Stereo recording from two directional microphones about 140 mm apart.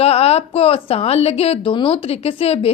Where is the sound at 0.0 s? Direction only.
45° left (ahead or behind).